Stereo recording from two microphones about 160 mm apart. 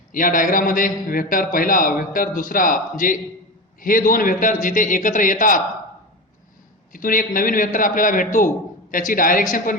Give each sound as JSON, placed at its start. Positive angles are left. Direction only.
{"t": 0.1, "sound": "a man's voice", "side_deg": 60}
{"t": 6.9, "sound": "a man's voice", "side_deg": 60}